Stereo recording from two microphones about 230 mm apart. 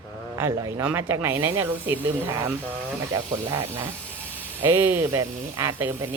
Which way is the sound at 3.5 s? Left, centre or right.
Centre.